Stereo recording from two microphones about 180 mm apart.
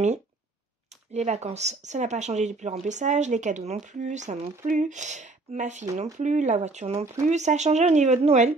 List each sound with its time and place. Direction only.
1.1 s speech: 40° right (ahead or behind)